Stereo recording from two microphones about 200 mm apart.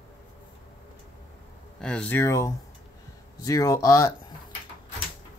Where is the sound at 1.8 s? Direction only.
5° left (ahead or behind).